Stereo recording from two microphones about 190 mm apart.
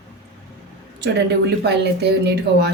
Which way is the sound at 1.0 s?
60° right (ahead or behind).